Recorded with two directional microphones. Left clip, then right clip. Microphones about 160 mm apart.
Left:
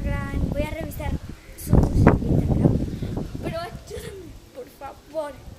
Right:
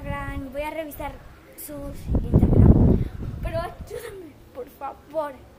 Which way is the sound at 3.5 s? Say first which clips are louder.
Right 7 dB; 10° left (ahead or behind).